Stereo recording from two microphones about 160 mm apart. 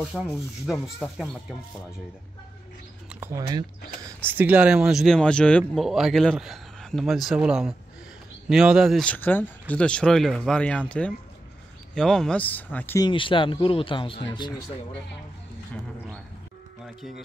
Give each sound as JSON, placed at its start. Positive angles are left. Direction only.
{"t": 0.1, "sound": "a man's voice", "side_deg": -5}
{"t": 3.2, "sound": "a man's voice", "side_deg": -15}
{"t": 13.0, "sound": "speech", "side_deg": 30}